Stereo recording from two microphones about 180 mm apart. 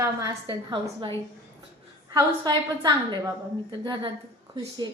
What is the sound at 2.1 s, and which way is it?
A woman's voice, 25° right (ahead or behind).